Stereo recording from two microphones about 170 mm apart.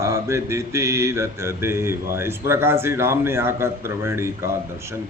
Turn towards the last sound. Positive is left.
turn(degrees=-15)  # may be behind; listen again after turning